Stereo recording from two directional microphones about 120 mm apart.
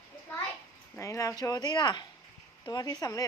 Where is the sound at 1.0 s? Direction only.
25° left (ahead or behind).